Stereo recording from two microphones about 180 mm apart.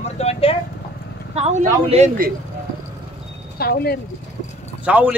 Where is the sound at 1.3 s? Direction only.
35° right (ahead or behind).